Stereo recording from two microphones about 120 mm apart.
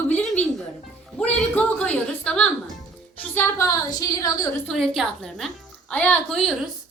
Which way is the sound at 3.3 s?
20° left (ahead or behind).